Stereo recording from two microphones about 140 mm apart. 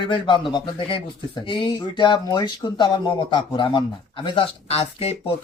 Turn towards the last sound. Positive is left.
turn(degrees=45)  # may be behind; listen again after turning